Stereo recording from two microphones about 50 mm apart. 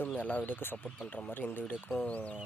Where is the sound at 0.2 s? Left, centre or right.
Left.